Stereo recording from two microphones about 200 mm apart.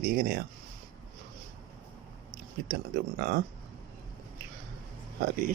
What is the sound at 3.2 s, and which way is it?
Speech, 55° right (ahead or behind).